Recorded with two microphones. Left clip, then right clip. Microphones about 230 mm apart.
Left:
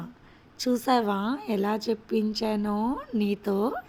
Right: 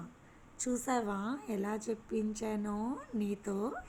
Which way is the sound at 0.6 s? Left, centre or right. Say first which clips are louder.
Left 10 dB; left.